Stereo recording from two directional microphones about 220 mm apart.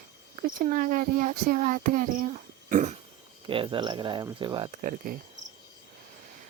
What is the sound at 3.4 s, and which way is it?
Speech, 25° right (ahead or behind).